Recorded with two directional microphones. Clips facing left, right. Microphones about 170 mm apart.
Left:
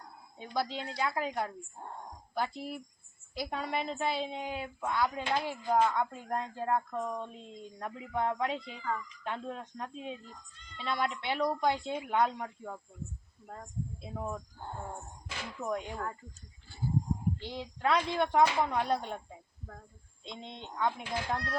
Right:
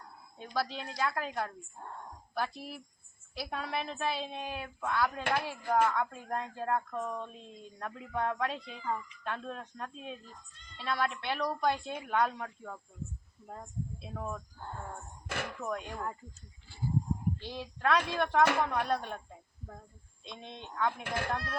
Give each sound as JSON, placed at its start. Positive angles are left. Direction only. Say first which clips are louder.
{"t": 0.5, "sound": "speech", "louder": "left 1 dB", "side_deg": 20}
{"t": 14.0, "sound": "speech", "louder": "left 3 dB", "side_deg": 15}
{"t": 15.3, "sound": "speech", "louder": "right 6 dB", "side_deg": -60}
{"t": 15.6, "sound": "speech", "louder": "left 6 dB", "side_deg": 15}
{"t": 17.4, "sound": "speech", "louder": "even", "side_deg": 20}
{"t": 20.2, "sound": "speech", "louder": "left 1 dB", "side_deg": 20}
{"t": 21.0, "sound": "speech", "louder": "even", "side_deg": -60}